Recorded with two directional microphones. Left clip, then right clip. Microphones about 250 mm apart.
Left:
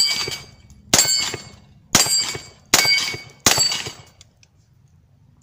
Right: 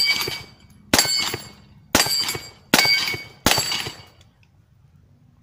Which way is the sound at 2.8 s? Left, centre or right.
Left.